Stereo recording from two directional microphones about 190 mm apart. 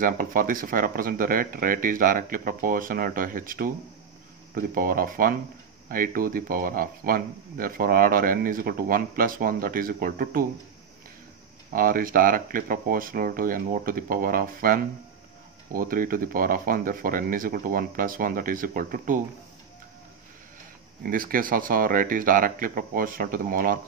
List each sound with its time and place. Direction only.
0.0 s speech: 45° right (ahead or behind)
11.7 s speech: 50° right (ahead or behind)
21.0 s speech: 50° right (ahead or behind)